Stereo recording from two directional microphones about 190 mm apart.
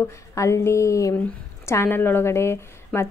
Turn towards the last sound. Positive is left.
turn(degrees=15)  # may be behind; listen again after turning